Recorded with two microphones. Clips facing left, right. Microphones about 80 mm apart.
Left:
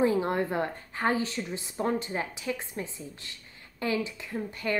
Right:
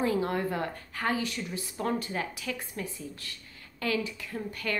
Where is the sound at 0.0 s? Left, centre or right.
Left.